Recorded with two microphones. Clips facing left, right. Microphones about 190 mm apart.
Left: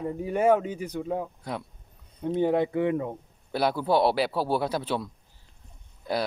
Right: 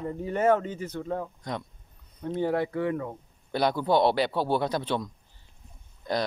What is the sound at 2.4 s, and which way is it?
Speech, 20° left (ahead or behind).